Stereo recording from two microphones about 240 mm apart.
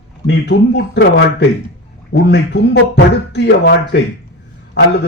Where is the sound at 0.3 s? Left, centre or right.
Left.